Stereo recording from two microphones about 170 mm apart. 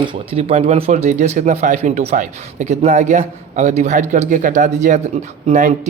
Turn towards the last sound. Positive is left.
turn(degrees=-50)  # may be behind; listen again after turning